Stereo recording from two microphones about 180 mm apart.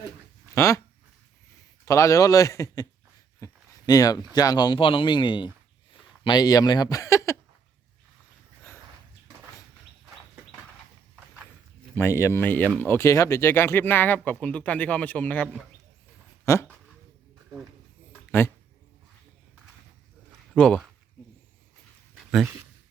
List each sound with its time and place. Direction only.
0.5 s dog: 15° left (ahead or behind)
1.8 s speech: 15° left (ahead or behind)
11.9 s speech: 15° left (ahead or behind)
16.5 s speech: 15° left (ahead or behind)
18.3 s speech: 15° left (ahead or behind)
20.5 s speech: 5° left (ahead or behind)
22.2 s a sound: 5° right (ahead or behind)